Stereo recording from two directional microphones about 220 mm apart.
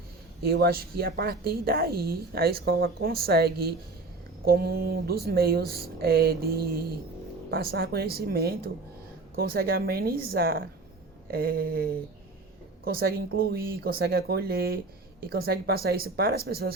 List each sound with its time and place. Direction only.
0.4 s a woman's voice: 45° right (ahead or behind)